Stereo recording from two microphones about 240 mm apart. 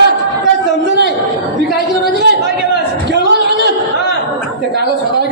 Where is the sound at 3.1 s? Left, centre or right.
Right.